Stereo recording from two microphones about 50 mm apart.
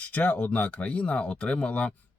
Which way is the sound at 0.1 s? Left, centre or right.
Left.